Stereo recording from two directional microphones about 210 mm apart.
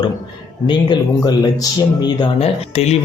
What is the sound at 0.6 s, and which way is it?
Speech, 20° left (ahead or behind).